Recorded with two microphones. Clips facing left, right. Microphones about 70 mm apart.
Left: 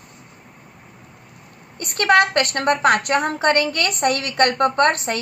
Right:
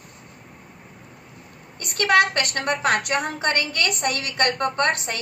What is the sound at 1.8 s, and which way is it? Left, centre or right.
A woman's voice, left.